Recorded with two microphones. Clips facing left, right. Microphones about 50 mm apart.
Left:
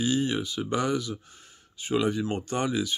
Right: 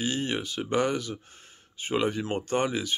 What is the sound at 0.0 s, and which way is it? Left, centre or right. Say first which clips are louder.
Speech: left 3 dB; right.